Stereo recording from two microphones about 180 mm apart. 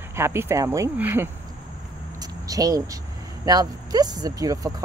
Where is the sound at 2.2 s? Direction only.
20° right (ahead or behind).